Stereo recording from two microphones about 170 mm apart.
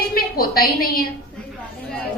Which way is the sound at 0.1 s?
60° left (ahead or behind).